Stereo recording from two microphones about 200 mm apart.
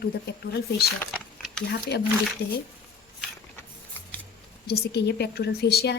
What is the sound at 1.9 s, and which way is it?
Speech, 55° left (ahead or behind).